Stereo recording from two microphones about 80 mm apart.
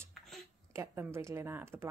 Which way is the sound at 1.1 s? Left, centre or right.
Right.